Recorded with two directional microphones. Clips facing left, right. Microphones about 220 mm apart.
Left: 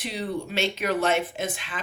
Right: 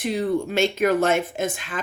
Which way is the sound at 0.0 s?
50° right (ahead or behind).